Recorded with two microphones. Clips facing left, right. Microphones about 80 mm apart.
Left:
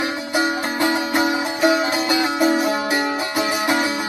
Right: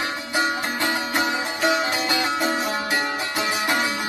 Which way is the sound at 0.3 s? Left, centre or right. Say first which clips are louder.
Left 3 dB; centre.